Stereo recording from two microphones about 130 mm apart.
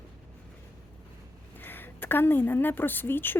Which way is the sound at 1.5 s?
15° left (ahead or behind).